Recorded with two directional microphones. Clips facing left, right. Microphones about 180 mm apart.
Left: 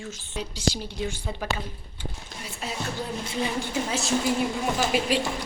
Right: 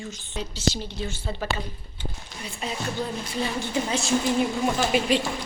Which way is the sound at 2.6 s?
5° left (ahead or behind).